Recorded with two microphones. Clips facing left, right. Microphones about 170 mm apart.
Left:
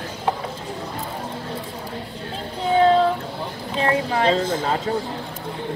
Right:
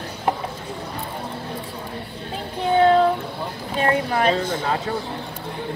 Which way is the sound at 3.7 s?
25° left (ahead or behind).